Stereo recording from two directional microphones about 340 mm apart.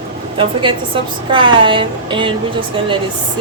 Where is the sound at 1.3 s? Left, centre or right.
Centre.